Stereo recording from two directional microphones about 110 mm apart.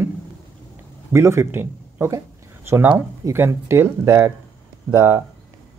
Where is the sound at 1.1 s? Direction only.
25° right (ahead or behind).